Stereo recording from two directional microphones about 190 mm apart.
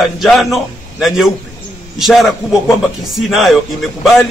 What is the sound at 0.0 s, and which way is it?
A man's voice, centre (ahead or behind).